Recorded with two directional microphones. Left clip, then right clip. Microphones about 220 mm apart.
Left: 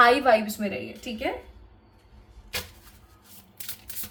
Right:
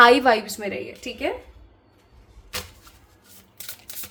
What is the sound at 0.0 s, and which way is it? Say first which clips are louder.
Speech: right 4 dB; 50° right (ahead or behind).